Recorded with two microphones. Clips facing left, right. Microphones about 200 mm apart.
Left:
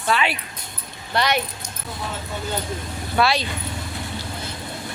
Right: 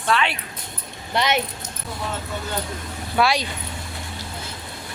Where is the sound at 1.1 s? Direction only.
20° right (ahead or behind).